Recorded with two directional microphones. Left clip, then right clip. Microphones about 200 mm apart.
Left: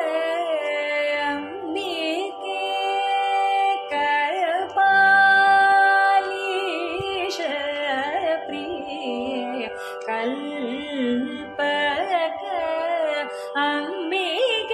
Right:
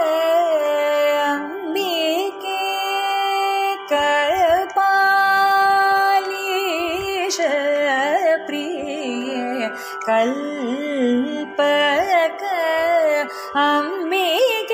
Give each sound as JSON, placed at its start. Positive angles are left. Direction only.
{"t": 0.0, "sound": "music", "side_deg": -30}
{"t": 10.0, "sound": "music", "side_deg": -30}
{"t": 11.5, "sound": "music", "side_deg": -25}